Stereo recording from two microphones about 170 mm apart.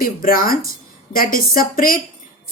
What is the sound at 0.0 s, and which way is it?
Speech, 60° left (ahead or behind).